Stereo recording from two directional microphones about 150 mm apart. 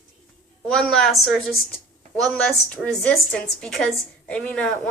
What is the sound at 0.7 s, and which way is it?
A woman's voice, 5° left (ahead or behind).